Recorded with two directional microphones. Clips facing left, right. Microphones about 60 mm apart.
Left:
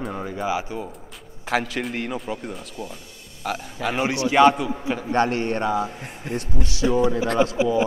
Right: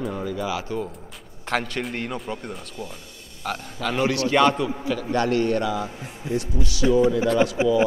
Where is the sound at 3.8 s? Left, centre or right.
Centre.